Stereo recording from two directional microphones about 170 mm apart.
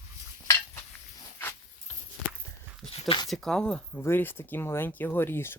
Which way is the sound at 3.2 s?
Centre (ahead or behind).